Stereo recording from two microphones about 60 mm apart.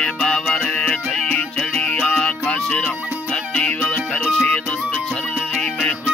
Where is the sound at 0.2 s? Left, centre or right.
Centre.